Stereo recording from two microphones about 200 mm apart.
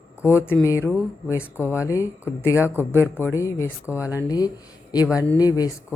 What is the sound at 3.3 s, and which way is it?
Speech, 15° left (ahead or behind).